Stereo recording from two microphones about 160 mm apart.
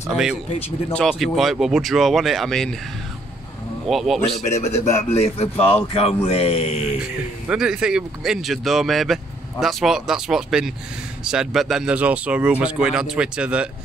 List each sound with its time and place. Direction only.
0.5 s speech: 40° left (ahead or behind)
0.9 s speech: centre (ahead or behind)
3.9 s speech: centre (ahead or behind)
4.5 s speech: 45° left (ahead or behind)
7.4 s speech: 5° right (ahead or behind)